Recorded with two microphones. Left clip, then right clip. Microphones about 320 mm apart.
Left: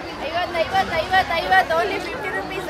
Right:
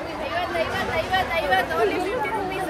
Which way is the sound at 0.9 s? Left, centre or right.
Centre.